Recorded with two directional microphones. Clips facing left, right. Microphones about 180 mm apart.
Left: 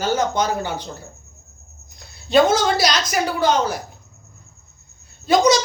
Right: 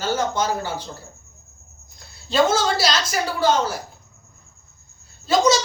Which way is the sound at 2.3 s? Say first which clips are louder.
Left 3 dB; 15° left (ahead or behind).